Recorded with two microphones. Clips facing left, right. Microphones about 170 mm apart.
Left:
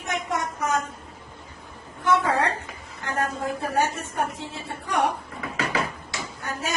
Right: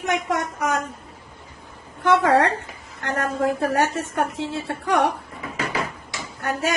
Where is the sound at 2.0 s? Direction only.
80° right.